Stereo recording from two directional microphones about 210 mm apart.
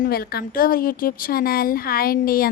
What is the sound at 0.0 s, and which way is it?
A woman's voice, 45° left (ahead or behind).